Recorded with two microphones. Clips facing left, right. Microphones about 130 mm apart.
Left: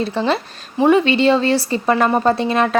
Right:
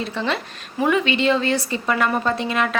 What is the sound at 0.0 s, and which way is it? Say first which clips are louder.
A woman's voice: left 6 dB; 35° left (ahead or behind).